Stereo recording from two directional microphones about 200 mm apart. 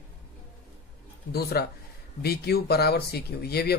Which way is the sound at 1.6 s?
55° left (ahead or behind).